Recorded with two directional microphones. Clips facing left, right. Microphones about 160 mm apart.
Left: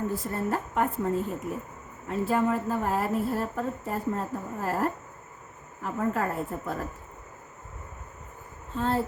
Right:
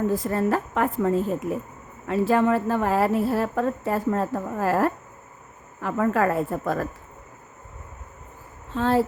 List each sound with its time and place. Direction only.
0.1 s a woman's voice: 90° right
8.7 s a woman's voice: 90° right